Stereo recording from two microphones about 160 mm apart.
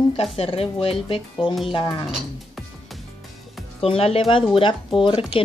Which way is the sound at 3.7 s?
35° left (ahead or behind).